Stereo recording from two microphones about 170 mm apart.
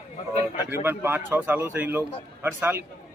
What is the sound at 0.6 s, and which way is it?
Speech, 15° right (ahead or behind).